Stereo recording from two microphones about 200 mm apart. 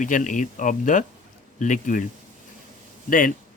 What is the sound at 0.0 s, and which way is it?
Speech, 40° left (ahead or behind).